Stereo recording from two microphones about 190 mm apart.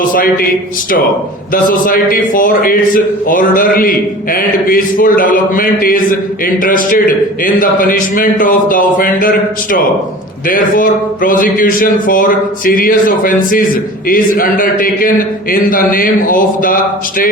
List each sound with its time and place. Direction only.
1.9 s a man's voice: 45° left (ahead or behind)
10.5 s a man's voice: 45° left (ahead or behind)